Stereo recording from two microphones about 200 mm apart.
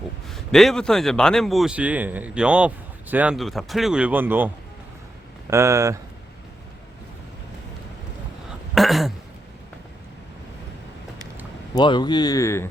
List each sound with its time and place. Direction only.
0.3 s a man's voice: centre (ahead or behind); by 6.0 s 15° right (ahead or behind)
8.7 s a sound: centre (ahead or behind)
11.7 s speech: 20° left (ahead or behind)